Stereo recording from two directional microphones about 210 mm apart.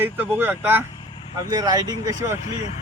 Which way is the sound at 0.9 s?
25° left (ahead or behind).